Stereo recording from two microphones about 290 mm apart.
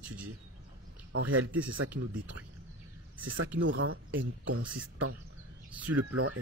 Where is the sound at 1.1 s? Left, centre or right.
Right.